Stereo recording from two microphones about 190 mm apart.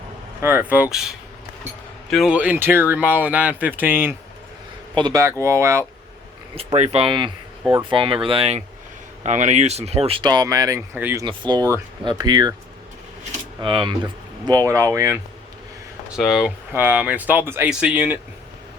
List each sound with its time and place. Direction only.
0.4 s speech: 10° right (ahead or behind)
2.0 s speech: centre (ahead or behind)
4.9 s speech: 20° right (ahead or behind)
6.6 s speech: 35° right (ahead or behind); by 11.3 s 10° right (ahead or behind)
11.3 s speech: 25° right (ahead or behind)
13.6 s speech: 25° right (ahead or behind)
16.0 s speech: 5° right (ahead or behind)